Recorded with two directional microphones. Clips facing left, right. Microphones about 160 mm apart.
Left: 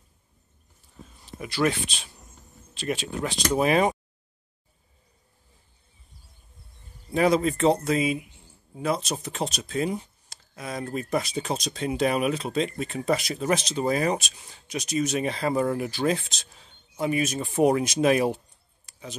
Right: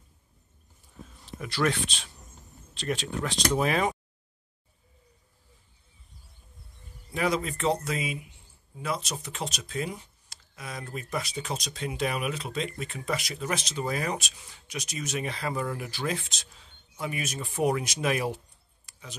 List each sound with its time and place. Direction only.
1.2 s speech: 5° left (ahead or behind)
7.1 s speech: 30° left (ahead or behind)
10.8 s speech: 40° left (ahead or behind)
13.7 s speech: 30° left (ahead or behind)
17.0 s speech: 25° left (ahead or behind)
18.9 s a sound: 25° left (ahead or behind)